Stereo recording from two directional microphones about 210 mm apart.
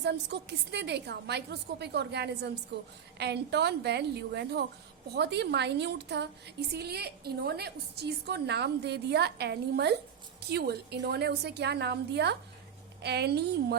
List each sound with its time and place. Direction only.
0.0 s a woman's voice: 55° right (ahead or behind)